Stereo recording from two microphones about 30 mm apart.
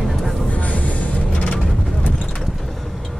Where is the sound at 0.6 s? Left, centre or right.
Left.